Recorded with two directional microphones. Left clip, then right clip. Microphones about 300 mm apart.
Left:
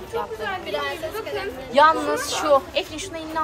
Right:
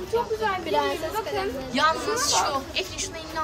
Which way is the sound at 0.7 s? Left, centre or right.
Right.